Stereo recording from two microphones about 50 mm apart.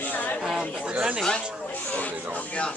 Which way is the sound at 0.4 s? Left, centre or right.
Centre.